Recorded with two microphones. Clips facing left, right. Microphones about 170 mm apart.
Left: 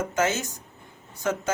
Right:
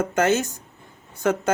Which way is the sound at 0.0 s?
55° right (ahead or behind).